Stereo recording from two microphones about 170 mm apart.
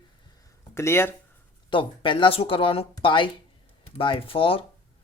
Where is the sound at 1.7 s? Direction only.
30° left (ahead or behind).